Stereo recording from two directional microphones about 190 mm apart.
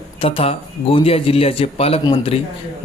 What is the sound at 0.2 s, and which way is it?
Speech, 30° left (ahead or behind).